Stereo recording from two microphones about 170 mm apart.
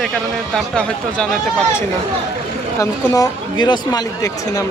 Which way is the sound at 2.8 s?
20° left (ahead or behind).